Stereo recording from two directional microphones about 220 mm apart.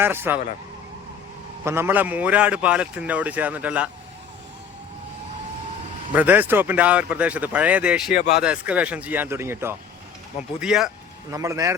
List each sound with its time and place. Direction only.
0.0 s a man's voice: 10° right (ahead or behind)
1.6 s a man's voice: 10° right (ahead or behind)
6.1 s a man's voice: 5° right (ahead or behind)
8.1 s speech: 45° left (ahead or behind)
8.4 s a man's voice: 5° right (ahead or behind)
11.3 s a man's voice: 15° right (ahead or behind)